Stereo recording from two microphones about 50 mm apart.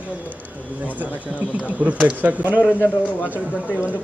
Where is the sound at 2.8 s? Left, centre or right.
Left.